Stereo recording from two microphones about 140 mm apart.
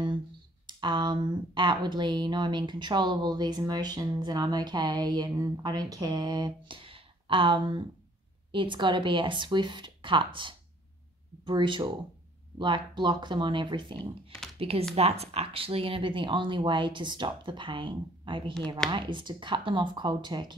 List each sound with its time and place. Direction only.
0.7 s speech: 35° right (ahead or behind)